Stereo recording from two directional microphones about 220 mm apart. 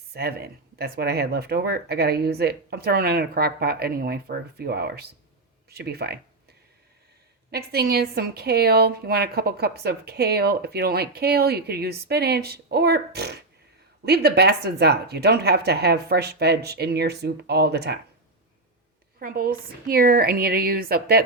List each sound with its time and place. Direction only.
0.1 s a woman's voice: 45° right (ahead or behind)
7.5 s a woman's voice: 45° right (ahead or behind)
19.2 s a woman's voice: 40° right (ahead or behind)